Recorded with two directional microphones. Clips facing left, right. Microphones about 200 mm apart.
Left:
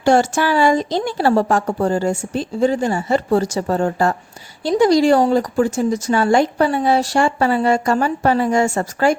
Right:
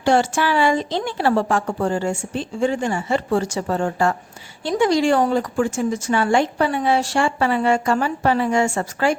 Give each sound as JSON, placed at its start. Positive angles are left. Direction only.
{"t": 0.0, "sound": "a woman's voice", "side_deg": 45}